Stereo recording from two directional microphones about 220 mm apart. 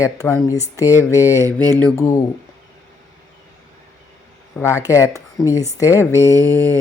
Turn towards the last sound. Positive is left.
turn(degrees=10)  # may be behind; listen again after turning